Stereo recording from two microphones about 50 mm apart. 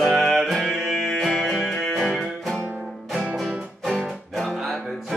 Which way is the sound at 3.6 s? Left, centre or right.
Centre.